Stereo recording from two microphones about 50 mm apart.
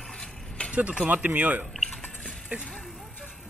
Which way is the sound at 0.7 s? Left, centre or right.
Centre.